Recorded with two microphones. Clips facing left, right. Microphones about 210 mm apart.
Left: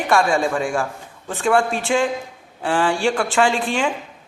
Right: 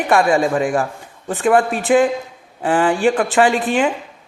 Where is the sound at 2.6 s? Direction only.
10° right (ahead or behind).